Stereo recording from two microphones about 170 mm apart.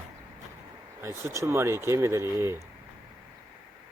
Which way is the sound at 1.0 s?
15° right (ahead or behind).